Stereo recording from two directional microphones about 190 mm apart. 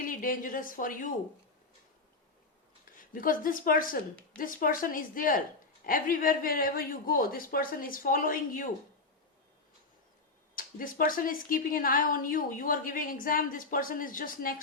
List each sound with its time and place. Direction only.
0.0 s a woman's voice: 45° left (ahead or behind)
3.0 s a woman's voice: 45° left (ahead or behind)
10.5 s a woman's voice: 45° left (ahead or behind)